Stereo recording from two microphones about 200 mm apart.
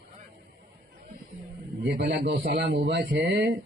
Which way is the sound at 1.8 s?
55° right (ahead or behind).